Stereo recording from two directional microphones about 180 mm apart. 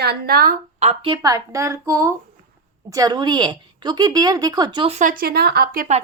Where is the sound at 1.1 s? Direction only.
20° right (ahead or behind).